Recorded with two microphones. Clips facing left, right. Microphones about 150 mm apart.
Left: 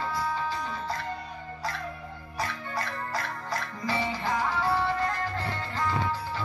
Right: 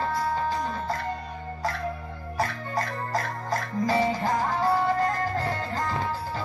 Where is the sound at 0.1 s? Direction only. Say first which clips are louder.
Right 4 dB; 45° right (ahead or behind).